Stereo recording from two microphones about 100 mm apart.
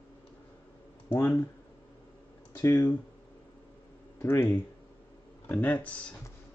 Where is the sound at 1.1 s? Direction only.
20° left (ahead or behind).